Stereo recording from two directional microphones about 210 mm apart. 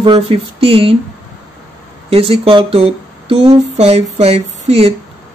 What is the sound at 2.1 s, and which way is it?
Speech, 25° right (ahead or behind).